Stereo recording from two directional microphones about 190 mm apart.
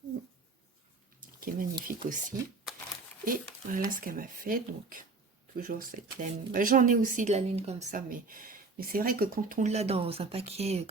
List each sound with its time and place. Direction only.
1.2 s a sound: 45° right (ahead or behind)
1.8 s a woman's voice: 45° right (ahead or behind)
3.7 s a woman's voice: 45° right (ahead or behind)